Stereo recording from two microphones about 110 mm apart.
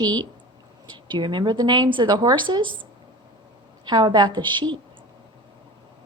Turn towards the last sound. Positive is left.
turn(degrees=-45)  # may be behind; listen again after turning